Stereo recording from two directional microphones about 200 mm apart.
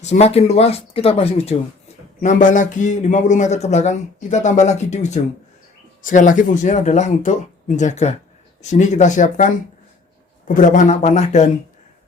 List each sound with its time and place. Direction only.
0.0 s a man's voice: 35° left (ahead or behind)
10.5 s a man's voice: 40° left (ahead or behind)